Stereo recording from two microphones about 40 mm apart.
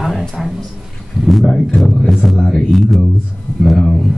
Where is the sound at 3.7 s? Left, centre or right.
Centre.